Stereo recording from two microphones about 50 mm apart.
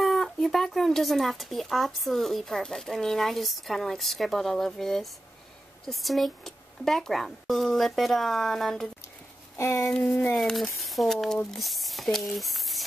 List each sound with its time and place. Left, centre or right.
0.0 s speech: centre
9.6 s child singing: left
10.5 s speech: centre